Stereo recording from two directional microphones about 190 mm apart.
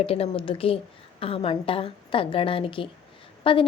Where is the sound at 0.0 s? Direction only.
30° left (ahead or behind).